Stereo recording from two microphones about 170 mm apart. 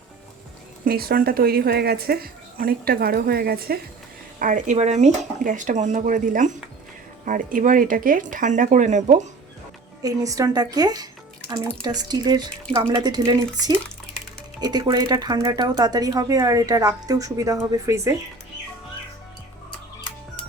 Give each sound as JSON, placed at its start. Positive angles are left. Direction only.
{"t": 0.9, "sound": "a woman's voice", "side_deg": -65}
{"t": 4.4, "sound": "speech", "side_deg": -50}
{"t": 10.0, "sound": "speech", "side_deg": -20}